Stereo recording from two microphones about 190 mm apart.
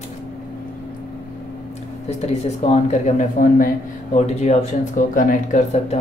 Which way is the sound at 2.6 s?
35° left (ahead or behind).